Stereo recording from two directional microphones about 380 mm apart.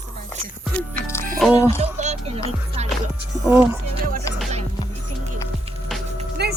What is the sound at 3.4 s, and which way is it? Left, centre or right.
Speech, centre.